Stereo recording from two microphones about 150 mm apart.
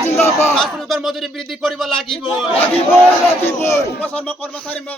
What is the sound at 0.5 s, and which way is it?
A man's voice, centre (ahead or behind).